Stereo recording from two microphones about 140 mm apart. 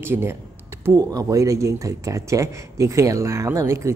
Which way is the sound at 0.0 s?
15° right (ahead or behind).